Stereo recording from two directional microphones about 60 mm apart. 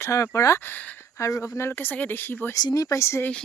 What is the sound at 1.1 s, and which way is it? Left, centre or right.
Speech, left.